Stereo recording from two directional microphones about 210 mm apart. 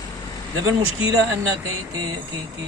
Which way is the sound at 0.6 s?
15° right (ahead or behind).